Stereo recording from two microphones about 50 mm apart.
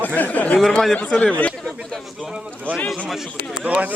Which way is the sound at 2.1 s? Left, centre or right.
Centre.